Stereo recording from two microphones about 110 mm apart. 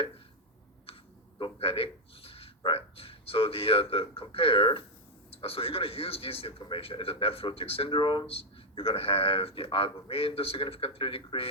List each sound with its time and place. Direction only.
1.4 s a man's voice: 60° left (ahead or behind)
8.3 s a man's voice: 60° left (ahead or behind)